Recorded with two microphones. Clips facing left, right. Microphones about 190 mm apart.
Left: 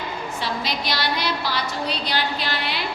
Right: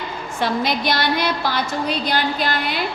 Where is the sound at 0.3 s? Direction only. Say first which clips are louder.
Right 8 dB; 50° right (ahead or behind).